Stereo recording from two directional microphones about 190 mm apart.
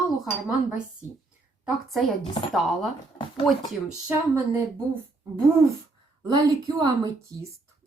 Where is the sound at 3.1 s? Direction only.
25° left (ahead or behind).